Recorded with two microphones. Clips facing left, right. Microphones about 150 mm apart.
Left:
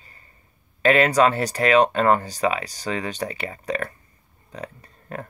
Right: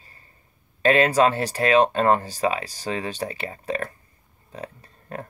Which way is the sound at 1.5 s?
30° right (ahead or behind).